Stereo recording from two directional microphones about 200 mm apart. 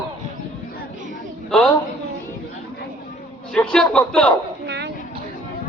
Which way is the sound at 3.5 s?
5° left (ahead or behind).